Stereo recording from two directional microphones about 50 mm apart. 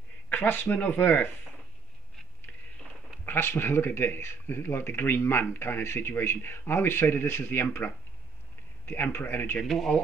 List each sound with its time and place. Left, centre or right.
0.3 s speech: left
3.3 s speech: left
7.8 s speech: left
9.6 s speech: centre